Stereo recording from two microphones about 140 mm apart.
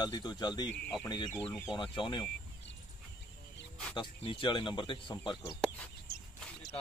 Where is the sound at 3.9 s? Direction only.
35° left (ahead or behind).